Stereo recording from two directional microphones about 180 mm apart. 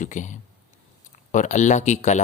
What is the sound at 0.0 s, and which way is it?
Speech, 45° left (ahead or behind).